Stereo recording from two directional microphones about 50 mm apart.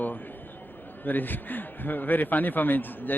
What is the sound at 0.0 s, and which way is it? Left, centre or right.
A man's voice, left.